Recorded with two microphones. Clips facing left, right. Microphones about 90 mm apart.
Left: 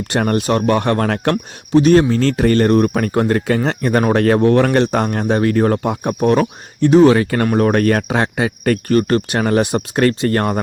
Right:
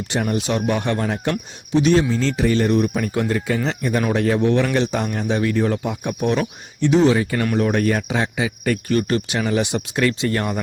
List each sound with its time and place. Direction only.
0.1 s a man's voice: 60° left (ahead or behind); by 7.1 s 45° left (ahead or behind)
7.1 s a man's voice: 60° left (ahead or behind)